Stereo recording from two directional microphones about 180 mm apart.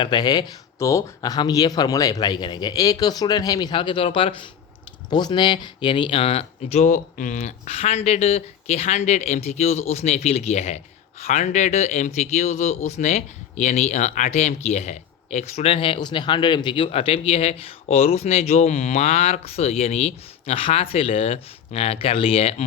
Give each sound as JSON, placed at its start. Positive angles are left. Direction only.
{"t": 0.0, "sound": "speech", "side_deg": 25}